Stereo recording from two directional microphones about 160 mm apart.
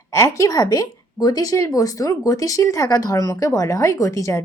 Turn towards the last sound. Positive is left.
turn(degrees=20)  # may be behind; listen again after turning